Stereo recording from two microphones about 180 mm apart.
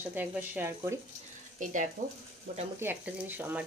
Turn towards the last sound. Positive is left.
turn(degrees=-10)  # may be behind; listen again after turning